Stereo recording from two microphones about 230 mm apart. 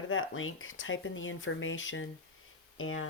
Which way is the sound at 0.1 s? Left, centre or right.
Left.